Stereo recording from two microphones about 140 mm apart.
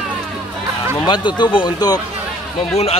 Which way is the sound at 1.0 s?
35° left (ahead or behind).